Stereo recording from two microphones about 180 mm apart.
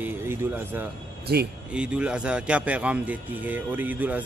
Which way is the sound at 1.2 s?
60° right (ahead or behind).